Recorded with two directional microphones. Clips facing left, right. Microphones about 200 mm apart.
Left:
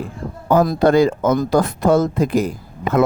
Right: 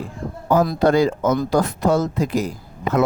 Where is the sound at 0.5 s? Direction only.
50° left (ahead or behind).